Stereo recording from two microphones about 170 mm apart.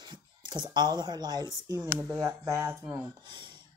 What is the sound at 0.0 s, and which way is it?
Speech, 25° right (ahead or behind).